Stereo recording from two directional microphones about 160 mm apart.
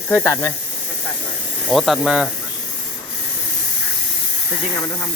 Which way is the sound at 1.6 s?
Centre (ahead or behind).